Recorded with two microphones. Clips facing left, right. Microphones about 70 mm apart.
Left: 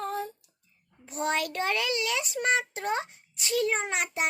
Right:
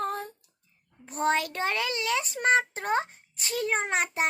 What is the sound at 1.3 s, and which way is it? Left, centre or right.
A child's voice, right.